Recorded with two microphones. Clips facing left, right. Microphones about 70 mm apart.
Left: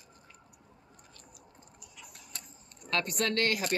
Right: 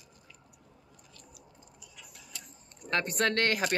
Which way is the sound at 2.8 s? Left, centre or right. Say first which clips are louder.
Right 2 dB; right.